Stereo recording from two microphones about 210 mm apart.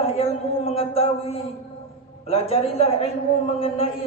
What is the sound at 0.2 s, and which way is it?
A man's voice, 25° left (ahead or behind).